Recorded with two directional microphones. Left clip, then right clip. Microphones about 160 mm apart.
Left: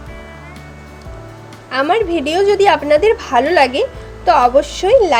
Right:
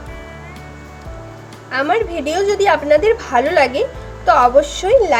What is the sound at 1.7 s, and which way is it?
A woman's voice, 30° left (ahead or behind).